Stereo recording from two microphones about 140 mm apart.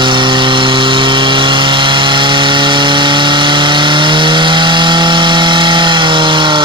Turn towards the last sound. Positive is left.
turn(degrees=-35)  # may be behind; listen again after turning